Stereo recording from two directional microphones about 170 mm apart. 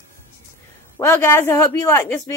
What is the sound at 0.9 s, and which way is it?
A woman's voice, 15° left (ahead or behind).